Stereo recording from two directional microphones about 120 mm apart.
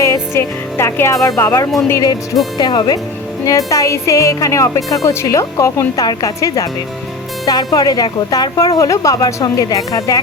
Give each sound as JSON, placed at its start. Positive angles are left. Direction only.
{"t": 0.0, "sound": "speech", "side_deg": 25}